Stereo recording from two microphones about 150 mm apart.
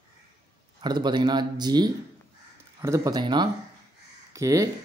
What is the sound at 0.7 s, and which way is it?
Speech, 30° right (ahead or behind).